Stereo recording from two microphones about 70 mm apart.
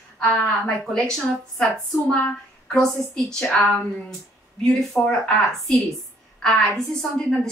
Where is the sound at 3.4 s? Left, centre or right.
Centre.